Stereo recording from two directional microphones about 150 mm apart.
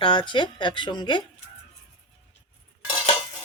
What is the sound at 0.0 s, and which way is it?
Speech, 30° left (ahead or behind).